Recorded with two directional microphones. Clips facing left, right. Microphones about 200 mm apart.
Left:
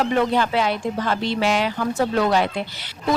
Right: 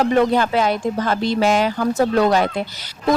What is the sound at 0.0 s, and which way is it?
Speech, 45° right (ahead or behind).